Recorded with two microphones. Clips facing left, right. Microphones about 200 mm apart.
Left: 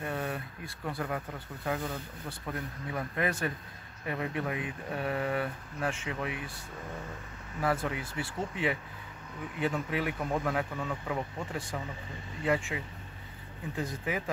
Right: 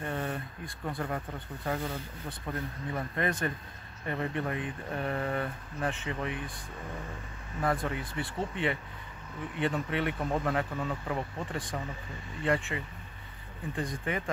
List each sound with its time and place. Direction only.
0.0 s a sound: 5° left (ahead or behind)
0.8 s speech: centre (ahead or behind)
7.6 s speech: centre (ahead or behind)